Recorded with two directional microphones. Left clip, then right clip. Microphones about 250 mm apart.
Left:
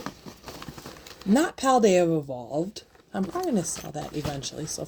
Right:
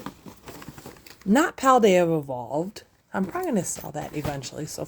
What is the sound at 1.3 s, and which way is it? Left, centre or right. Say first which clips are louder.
Speech: right 3 dB; right.